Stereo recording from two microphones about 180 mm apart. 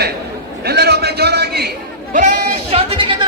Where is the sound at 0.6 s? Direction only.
65° right (ahead or behind).